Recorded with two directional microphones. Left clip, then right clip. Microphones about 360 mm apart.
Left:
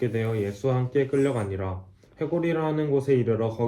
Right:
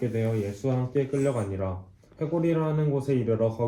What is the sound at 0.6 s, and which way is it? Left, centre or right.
Speech, left.